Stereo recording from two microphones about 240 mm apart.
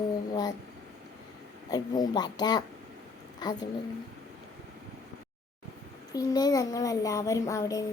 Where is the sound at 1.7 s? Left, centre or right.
Centre.